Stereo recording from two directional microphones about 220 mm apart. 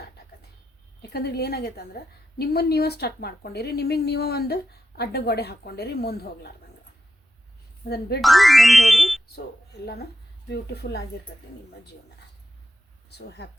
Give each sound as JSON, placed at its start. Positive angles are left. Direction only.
{"t": 1.1, "sound": "speech", "side_deg": 45}
{"t": 7.9, "sound": "speech", "side_deg": 45}
{"t": 8.2, "sound": "speech", "side_deg": 0}
{"t": 9.8, "sound": "speech", "side_deg": 45}
{"t": 13.1, "sound": "speech", "side_deg": 50}